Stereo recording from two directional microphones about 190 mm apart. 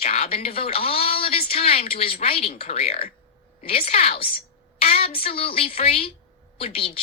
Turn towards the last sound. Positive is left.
turn(degrees=30)  # may be behind; listen again after turning